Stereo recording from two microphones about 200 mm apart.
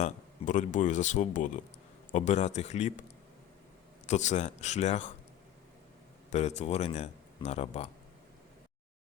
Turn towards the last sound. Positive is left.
turn(degrees=30)  # may be behind; listen again after turning